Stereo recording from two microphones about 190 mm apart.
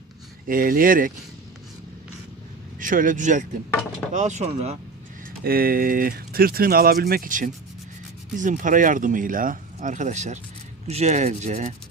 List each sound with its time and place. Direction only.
0.4 s speech: 45° right (ahead or behind)
2.7 s speech: 45° right (ahead or behind)
5.4 s speech: 50° right (ahead or behind)